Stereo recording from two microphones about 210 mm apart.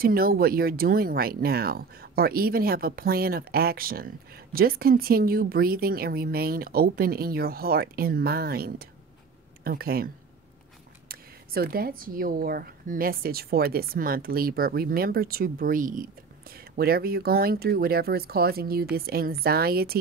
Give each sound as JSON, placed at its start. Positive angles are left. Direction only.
{"t": 0.0, "sound": "speech", "side_deg": -45}